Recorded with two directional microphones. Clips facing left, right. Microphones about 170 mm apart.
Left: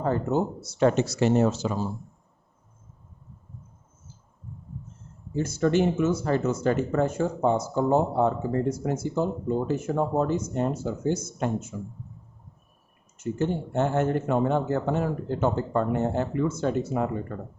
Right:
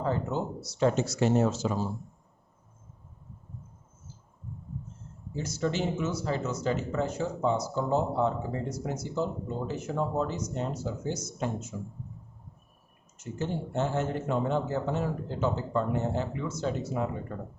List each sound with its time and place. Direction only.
0.0 s speech: 50° left (ahead or behind); by 1.6 s 70° left (ahead or behind)
5.3 s speech: 55° left (ahead or behind)
13.1 s speech: 55° left (ahead or behind)